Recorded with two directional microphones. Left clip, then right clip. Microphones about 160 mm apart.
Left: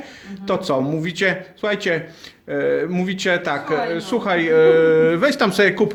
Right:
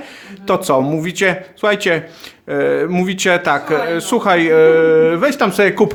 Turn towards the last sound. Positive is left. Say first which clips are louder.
# right 3 dB
turn(degrees=-10)  # may be behind; listen again after turning